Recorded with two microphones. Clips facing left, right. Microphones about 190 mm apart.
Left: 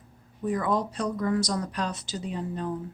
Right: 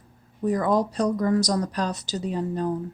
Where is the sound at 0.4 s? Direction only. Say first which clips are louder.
Right 4 dB; 40° right (ahead or behind).